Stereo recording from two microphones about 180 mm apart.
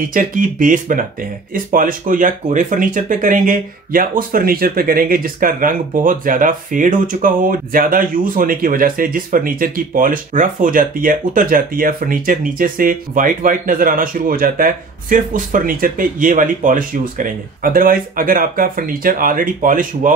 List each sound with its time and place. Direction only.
0.0 s speech: 50° right (ahead or behind)